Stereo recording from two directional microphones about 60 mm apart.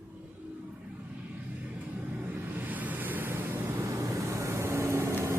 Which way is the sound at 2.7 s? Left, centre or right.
Right.